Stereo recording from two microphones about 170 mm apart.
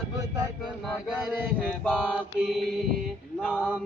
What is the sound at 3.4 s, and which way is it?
Chant, 10° left (ahead or behind).